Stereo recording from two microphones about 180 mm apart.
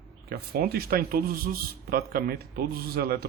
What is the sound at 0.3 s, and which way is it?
Speech, 60° right (ahead or behind).